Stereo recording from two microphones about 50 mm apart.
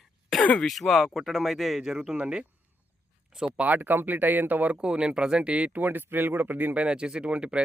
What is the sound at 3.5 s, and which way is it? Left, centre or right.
Speech, right.